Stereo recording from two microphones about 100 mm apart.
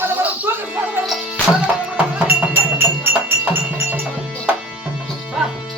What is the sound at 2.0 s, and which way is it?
Music, 15° right (ahead or behind).